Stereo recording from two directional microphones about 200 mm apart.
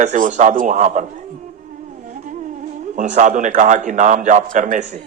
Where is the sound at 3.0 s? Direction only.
35° right (ahead or behind).